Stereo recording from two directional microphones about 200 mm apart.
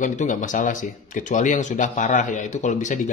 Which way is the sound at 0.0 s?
40° left (ahead or behind).